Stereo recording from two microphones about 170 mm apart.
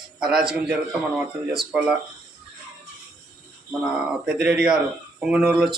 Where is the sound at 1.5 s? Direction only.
Centre (ahead or behind).